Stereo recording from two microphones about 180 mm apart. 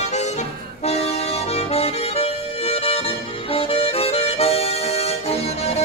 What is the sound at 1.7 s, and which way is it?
Accordion, 35° left (ahead or behind).